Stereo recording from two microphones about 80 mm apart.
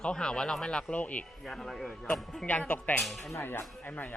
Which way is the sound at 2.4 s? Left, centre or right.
Centre.